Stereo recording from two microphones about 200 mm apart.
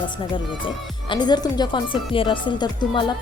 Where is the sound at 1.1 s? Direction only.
20° left (ahead or behind).